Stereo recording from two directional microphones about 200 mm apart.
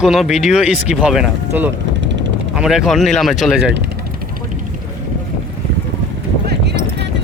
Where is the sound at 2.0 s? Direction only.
65° right (ahead or behind).